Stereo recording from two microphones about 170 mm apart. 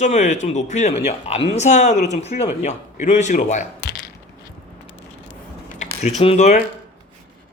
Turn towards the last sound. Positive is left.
turn(degrees=40)  # may be behind; listen again after turning